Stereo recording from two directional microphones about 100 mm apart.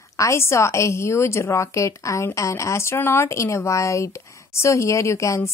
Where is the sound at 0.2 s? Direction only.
30° left (ahead or behind).